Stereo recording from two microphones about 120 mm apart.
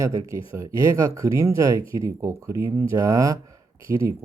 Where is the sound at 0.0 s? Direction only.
30° right (ahead or behind).